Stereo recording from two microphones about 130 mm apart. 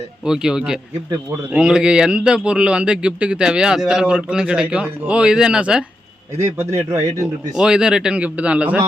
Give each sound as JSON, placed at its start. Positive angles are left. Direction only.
{"t": 0.3, "sound": "speech", "side_deg": -5}
{"t": 6.4, "sound": "speech", "side_deg": -20}
{"t": 7.5, "sound": "speech", "side_deg": -5}